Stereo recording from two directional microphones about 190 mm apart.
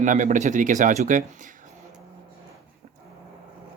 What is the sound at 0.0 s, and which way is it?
Speech, 40° right (ahead or behind).